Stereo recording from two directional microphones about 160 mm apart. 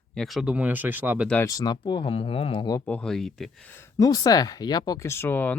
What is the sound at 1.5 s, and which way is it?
Speech, 25° left (ahead or behind).